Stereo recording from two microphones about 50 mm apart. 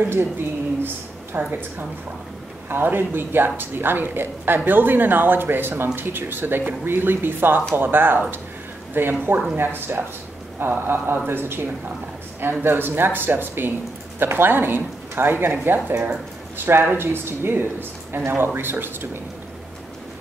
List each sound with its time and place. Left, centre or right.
0.1 s speech: right
1.3 s speech: right
2.7 s speech: right